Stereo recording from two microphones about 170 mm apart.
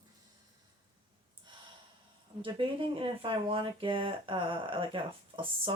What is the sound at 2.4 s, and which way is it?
Speech, 30° right (ahead or behind).